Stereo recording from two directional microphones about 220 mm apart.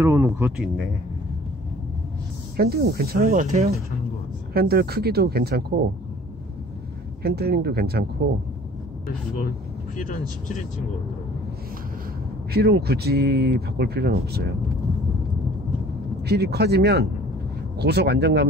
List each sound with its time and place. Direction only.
0.0 s speech: 10° right (ahead or behind)
2.5 s speech: 45° right (ahead or behind)
3.3 s speech: 30° right (ahead or behind)
4.6 s speech: 45° right (ahead or behind)
7.2 s speech: 45° right (ahead or behind)
9.9 s speech: 35° left (ahead or behind)
12.5 s speech: 45° right (ahead or behind)
16.3 s speech: 45° right (ahead or behind)